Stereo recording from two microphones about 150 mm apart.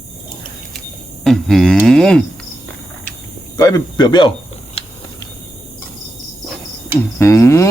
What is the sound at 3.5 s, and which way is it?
Speech, 25° left (ahead or behind).